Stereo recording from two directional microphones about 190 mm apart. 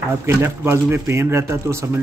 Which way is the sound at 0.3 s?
15° right (ahead or behind).